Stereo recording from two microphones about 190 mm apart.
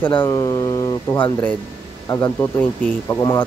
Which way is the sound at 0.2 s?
25° left (ahead or behind).